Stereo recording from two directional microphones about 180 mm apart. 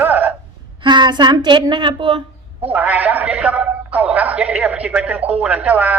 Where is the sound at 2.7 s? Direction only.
10° right (ahead or behind).